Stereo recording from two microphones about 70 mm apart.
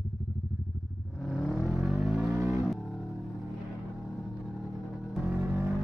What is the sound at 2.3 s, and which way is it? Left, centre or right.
Vehicle, right.